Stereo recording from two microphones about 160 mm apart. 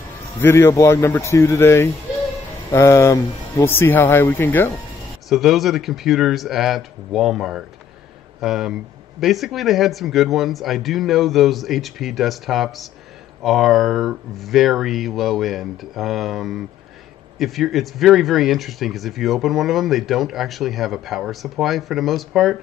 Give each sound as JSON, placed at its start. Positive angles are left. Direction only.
{"t": 0.4, "sound": "speech", "side_deg": 15}
{"t": 5.3, "sound": "speech", "side_deg": 0}